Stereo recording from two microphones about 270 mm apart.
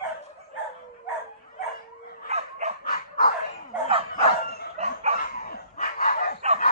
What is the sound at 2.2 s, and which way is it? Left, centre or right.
Dog, right.